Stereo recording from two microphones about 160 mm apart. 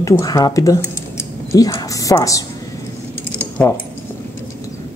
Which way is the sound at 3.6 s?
20° left (ahead or behind).